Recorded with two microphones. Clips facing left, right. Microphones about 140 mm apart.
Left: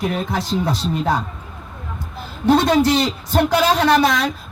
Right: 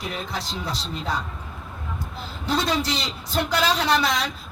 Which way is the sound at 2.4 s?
55° left (ahead or behind).